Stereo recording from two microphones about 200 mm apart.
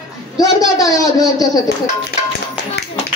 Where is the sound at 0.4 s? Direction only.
15° left (ahead or behind).